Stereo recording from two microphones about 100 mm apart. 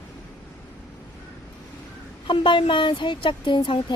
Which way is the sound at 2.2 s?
55° left (ahead or behind).